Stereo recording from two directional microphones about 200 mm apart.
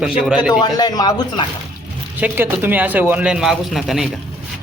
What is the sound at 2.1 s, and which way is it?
A man's voice, 10° right (ahead or behind).